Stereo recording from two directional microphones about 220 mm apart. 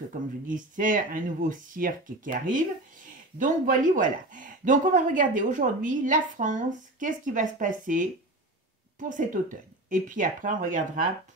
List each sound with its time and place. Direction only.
0.1 s speech: 40° right (ahead or behind)
9.1 s speech: 35° right (ahead or behind)